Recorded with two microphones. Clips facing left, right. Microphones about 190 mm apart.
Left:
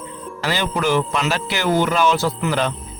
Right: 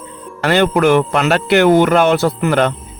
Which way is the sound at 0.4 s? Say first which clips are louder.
Right 9 dB; 60° right (ahead or behind).